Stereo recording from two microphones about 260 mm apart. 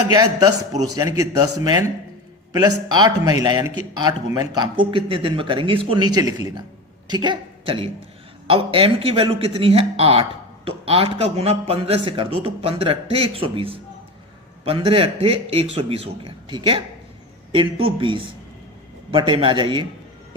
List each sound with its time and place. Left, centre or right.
0.1 s a man's voice: centre